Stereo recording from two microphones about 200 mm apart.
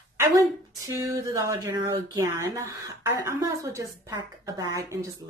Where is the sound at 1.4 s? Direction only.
15° right (ahead or behind).